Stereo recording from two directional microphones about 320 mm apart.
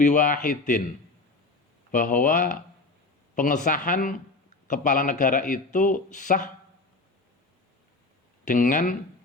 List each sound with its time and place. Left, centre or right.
0.0 s a man's voice: left
1.9 s a man's voice: left
8.4 s a man's voice: left